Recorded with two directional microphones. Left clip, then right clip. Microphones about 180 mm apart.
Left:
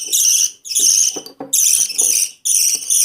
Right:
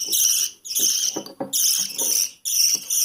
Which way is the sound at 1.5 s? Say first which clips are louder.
Left 6 dB; 10° right (ahead or behind).